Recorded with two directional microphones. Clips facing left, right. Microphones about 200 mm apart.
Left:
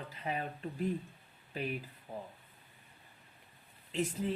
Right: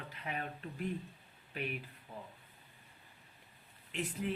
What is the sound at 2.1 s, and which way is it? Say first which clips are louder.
Speech: left 5 dB; 45° left (ahead or behind).